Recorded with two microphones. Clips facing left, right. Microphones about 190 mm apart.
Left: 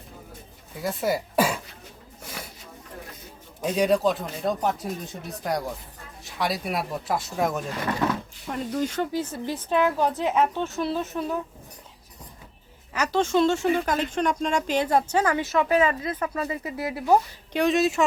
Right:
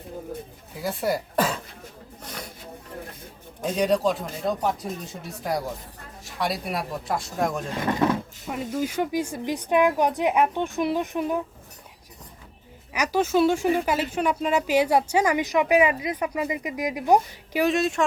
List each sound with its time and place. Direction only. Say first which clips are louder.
0.8 s speech: even; centre (ahead or behind)
2.2 s a sound: right 1 dB; 5° left (ahead or behind)
3.6 s speech: left 1 dB; 5° left (ahead or behind)
7.9 s speech: right 4 dB; 20° right (ahead or behind)
8.4 s speech: left 1 dB; 5° right (ahead or behind)
12.9 s speech: even; 10° right (ahead or behind)
17.6 s speech: left 1 dB; centre (ahead or behind)